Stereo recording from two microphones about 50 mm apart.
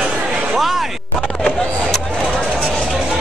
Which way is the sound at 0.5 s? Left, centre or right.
Centre.